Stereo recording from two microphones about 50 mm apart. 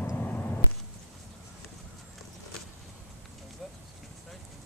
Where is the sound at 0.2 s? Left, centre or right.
Left.